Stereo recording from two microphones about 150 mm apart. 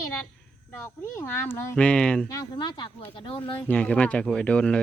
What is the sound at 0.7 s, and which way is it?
Speech, 15° left (ahead or behind).